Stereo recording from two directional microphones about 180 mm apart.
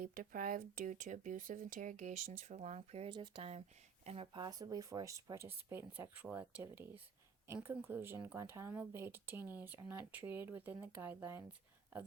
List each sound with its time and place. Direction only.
0.0 s speech: 50° right (ahead or behind); by 11.4 s 10° right (ahead or behind)